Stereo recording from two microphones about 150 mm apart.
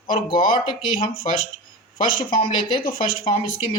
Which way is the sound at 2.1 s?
35° left (ahead or behind).